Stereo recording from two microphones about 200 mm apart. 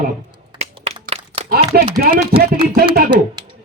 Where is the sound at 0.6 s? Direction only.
30° right (ahead or behind).